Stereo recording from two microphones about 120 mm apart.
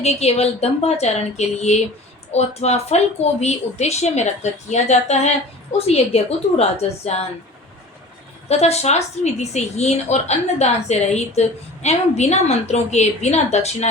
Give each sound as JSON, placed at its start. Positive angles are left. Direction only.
{"t": 0.0, "sound": "a woman's voice", "side_deg": 65}
{"t": 5.7, "sound": "speech", "side_deg": 60}
{"t": 8.4, "sound": "a woman's voice", "side_deg": 60}